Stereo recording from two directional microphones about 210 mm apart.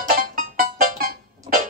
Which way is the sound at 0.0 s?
45° right (ahead or behind).